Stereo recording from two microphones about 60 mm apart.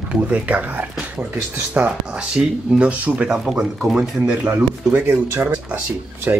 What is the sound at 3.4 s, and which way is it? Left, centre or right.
Speech, centre.